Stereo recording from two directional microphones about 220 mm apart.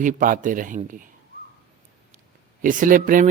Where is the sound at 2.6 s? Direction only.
35° right (ahead or behind).